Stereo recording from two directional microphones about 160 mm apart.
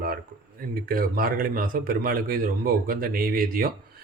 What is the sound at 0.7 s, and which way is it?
Speech, 70° right (ahead or behind).